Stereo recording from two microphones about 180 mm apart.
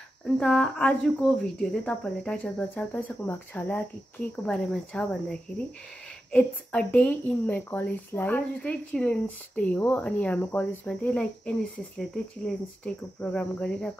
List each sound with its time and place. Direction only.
0.4 s a woman's voice: 5° left (ahead or behind)